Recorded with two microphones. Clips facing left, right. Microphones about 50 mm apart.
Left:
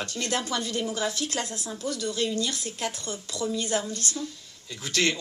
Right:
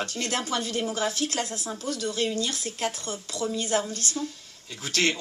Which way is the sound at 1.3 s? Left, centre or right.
Left.